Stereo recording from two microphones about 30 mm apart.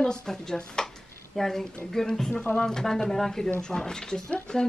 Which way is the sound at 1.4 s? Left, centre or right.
Centre.